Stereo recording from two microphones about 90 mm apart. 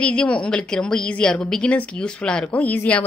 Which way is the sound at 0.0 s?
15° left (ahead or behind).